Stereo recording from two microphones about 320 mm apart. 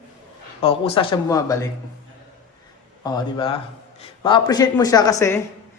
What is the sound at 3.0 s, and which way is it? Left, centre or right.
A man's voice, centre.